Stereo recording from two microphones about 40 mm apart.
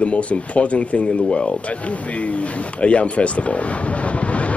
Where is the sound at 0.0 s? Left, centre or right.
Left.